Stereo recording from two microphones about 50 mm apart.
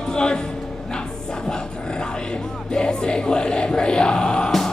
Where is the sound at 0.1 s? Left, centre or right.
Centre.